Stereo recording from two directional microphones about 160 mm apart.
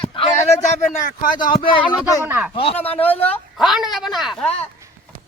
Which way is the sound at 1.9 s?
20° left (ahead or behind).